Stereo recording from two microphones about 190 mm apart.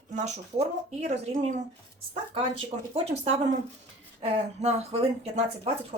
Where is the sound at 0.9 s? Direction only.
35° right (ahead or behind).